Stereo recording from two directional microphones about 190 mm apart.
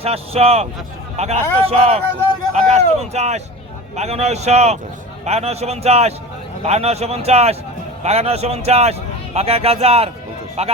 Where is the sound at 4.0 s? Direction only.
35° right (ahead or behind).